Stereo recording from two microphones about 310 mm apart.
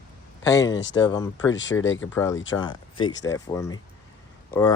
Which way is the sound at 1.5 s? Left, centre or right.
Left.